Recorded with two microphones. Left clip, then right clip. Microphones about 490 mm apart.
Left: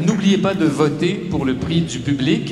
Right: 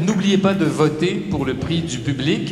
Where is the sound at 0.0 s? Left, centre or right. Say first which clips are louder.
Even; centre.